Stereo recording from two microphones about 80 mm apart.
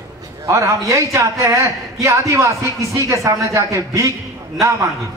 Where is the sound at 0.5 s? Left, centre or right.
Right.